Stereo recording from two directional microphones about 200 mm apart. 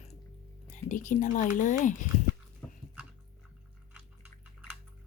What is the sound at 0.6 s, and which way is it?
Speech, 40° left (ahead or behind).